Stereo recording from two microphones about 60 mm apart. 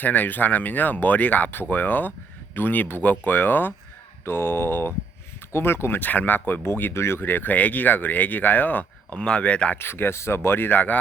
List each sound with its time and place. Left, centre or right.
0.0 s speech: left
7.2 s speech: left
9.7 s speech: left